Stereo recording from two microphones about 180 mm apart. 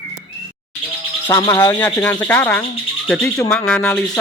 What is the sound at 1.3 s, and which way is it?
Speech, 15° left (ahead or behind).